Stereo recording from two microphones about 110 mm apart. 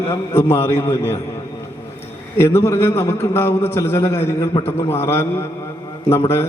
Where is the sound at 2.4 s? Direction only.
20° left (ahead or behind).